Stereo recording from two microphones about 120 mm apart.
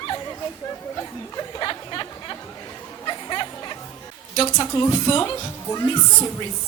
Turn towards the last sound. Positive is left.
turn(degrees=25)  # may be behind; listen again after turning